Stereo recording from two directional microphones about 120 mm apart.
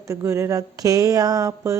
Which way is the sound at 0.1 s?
25° right (ahead or behind).